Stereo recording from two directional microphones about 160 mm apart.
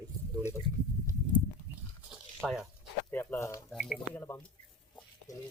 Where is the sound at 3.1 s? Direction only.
15° left (ahead or behind).